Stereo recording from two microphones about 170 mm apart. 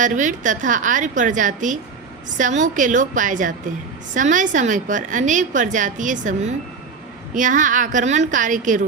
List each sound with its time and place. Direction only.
0.0 s a woman's voice: 45° right (ahead or behind)